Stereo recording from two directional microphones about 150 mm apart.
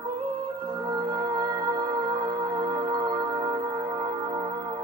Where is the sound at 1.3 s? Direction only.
30° right (ahead or behind).